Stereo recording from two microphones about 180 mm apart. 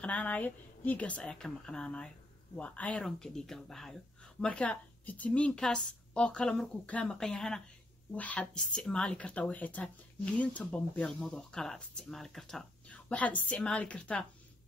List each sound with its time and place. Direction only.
0.0 s a woman's voice: 10° left (ahead or behind)